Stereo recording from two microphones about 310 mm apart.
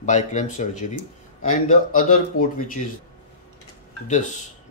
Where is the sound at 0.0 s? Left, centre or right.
Left.